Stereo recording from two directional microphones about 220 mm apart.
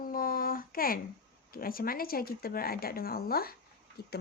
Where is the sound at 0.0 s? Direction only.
40° left (ahead or behind).